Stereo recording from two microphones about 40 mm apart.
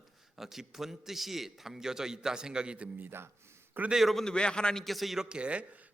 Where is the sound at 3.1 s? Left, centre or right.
Right.